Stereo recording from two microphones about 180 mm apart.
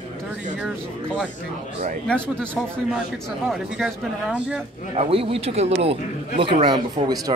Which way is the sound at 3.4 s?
Centre (ahead or behind).